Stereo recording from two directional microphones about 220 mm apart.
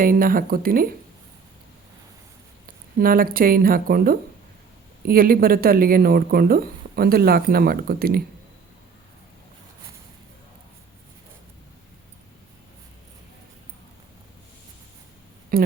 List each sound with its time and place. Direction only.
0.0 s speech: 40° right (ahead or behind)
2.6 s speech: 40° right (ahead or behind)
15.5 s speech: 40° right (ahead or behind)